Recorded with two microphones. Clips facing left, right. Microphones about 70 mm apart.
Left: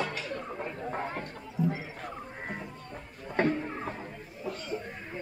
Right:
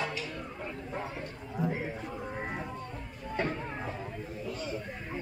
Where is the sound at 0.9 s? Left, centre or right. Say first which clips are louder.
Left 3 dB; left.